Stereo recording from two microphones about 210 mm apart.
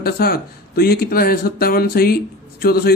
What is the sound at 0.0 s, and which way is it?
Speech, 45° left (ahead or behind).